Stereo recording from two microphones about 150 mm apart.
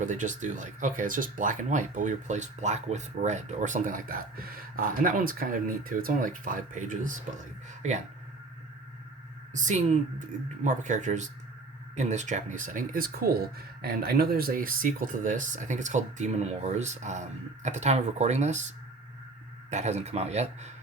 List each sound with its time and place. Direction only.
0.0 s speech: 55° right (ahead or behind)
9.5 s speech: 55° right (ahead or behind)
19.7 s speech: 50° right (ahead or behind)